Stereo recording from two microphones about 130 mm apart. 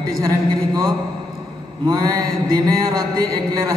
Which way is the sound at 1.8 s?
30° right (ahead or behind).